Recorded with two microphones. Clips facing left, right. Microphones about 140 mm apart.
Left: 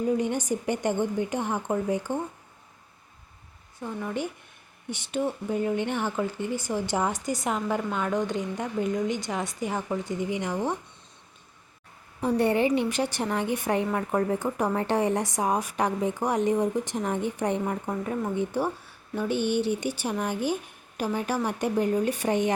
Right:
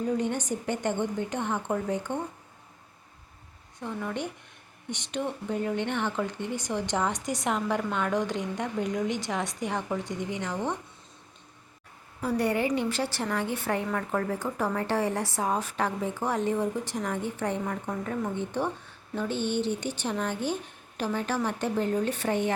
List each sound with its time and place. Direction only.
0.1 s a woman's voice: 10° left (ahead or behind)
3.8 s speech: 5° left (ahead or behind)
12.2 s a woman's voice: 25° left (ahead or behind)